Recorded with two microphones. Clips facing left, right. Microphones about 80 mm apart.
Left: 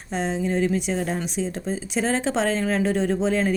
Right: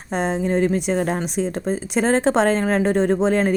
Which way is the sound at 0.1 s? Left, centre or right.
Right.